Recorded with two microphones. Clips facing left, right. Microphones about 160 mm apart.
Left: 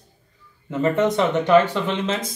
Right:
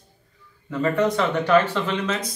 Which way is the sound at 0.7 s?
25° left (ahead or behind).